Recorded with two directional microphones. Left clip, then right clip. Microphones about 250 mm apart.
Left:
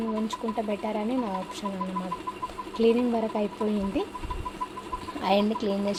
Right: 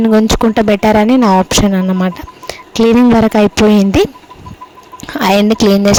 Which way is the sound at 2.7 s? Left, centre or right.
Right.